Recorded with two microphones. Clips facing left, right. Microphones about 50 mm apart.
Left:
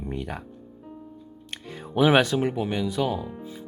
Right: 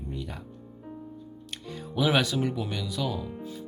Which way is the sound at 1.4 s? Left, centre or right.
Left.